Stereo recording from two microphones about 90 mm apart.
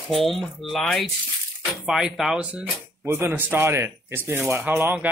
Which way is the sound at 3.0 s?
25° right (ahead or behind).